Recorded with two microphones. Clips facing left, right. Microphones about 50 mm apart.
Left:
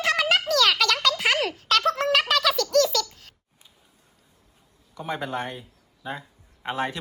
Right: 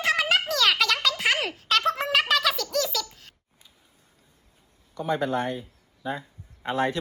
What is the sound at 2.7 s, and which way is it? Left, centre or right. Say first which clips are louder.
Baby laughter: left 6 dB; centre.